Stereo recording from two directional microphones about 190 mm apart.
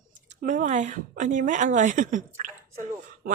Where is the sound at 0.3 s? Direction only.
40° right (ahead or behind).